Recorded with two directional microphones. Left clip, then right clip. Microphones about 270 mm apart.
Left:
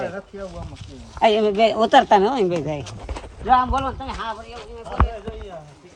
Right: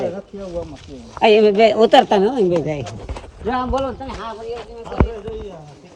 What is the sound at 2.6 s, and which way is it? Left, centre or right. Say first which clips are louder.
Speech: right 5 dB; left.